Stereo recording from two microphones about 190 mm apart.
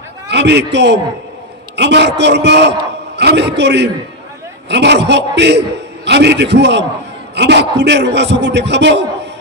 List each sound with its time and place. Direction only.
0.3 s a man's voice: 65° right (ahead or behind)